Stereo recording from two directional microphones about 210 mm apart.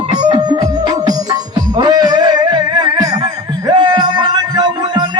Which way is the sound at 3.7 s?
20° right (ahead or behind).